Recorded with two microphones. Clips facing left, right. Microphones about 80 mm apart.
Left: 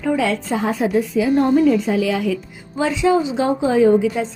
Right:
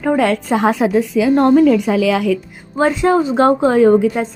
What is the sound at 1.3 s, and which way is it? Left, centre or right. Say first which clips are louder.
A woman's voice: right 4 dB; right.